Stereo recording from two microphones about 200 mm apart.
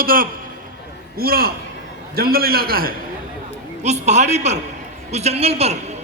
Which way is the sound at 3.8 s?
35° right (ahead or behind).